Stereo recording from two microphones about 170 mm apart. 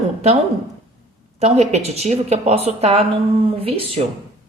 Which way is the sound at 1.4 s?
40° right (ahead or behind).